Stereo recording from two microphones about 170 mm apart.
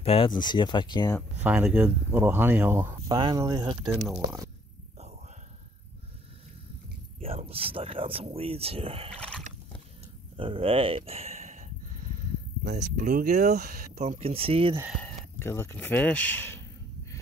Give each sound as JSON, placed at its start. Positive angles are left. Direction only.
{"t": 0.0, "sound": "speech", "side_deg": 35}
{"t": 1.4, "sound": "speech", "side_deg": -5}
{"t": 3.1, "sound": "speech", "side_deg": -25}
{"t": 7.2, "sound": "speech", "side_deg": -35}
{"t": 10.3, "sound": "speech", "side_deg": -30}
{"t": 12.7, "sound": "speech", "side_deg": -50}
{"t": 13.5, "sound": "speech", "side_deg": -65}
{"t": 14.0, "sound": "speech", "side_deg": -35}
{"t": 15.0, "sound": "speech", "side_deg": 15}